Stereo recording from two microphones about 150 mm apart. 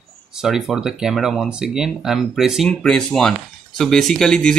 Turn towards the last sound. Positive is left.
turn(degrees=5)  # may be behind; listen again after turning